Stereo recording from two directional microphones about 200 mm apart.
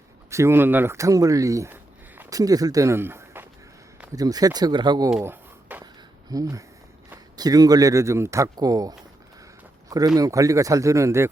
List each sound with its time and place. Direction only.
0.3 s speech: 15° right (ahead or behind)
5.1 s a sound: 10° right (ahead or behind)
6.3 s speech: 15° right (ahead or behind)
10.2 s speech: 15° right (ahead or behind)